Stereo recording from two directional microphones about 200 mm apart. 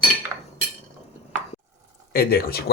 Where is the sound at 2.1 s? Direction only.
50° left (ahead or behind).